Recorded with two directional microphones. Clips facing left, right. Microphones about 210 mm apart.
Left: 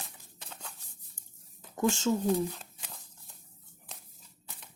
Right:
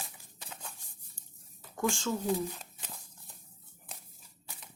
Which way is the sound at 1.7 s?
20° left (ahead or behind).